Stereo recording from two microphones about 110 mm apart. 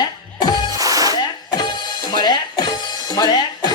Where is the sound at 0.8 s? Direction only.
35° right (ahead or behind).